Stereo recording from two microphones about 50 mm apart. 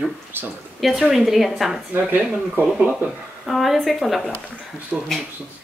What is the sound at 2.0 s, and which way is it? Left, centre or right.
Speech, right.